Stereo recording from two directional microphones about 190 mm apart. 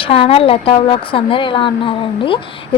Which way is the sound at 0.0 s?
30° left (ahead or behind).